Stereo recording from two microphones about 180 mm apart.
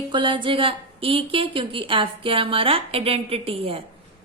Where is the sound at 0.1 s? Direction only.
25° right (ahead or behind).